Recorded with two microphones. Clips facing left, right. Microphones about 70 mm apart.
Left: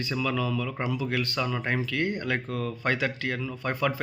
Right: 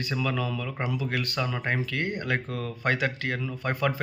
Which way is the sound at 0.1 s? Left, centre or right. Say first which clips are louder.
Left 1 dB; right.